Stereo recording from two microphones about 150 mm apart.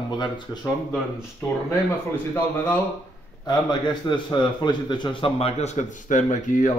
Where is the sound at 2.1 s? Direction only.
10° left (ahead or behind).